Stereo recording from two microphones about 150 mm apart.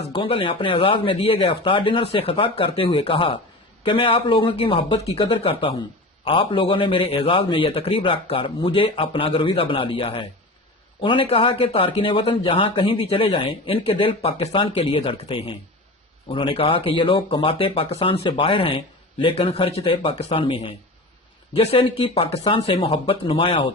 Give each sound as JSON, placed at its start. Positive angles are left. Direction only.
{"t": 0.0, "sound": "a man's voice", "side_deg": 35}